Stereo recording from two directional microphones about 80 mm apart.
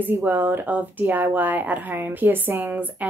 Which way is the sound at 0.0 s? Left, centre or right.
Right.